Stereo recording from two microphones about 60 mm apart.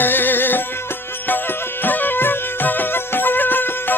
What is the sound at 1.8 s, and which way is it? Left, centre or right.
Music, left.